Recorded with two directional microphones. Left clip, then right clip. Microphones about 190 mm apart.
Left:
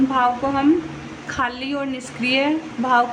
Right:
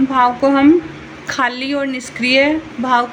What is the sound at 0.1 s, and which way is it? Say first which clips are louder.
A woman's voice: right 6 dB; 20° right (ahead or behind).